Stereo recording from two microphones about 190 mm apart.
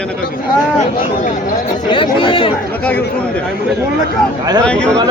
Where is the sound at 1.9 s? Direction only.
25° left (ahead or behind).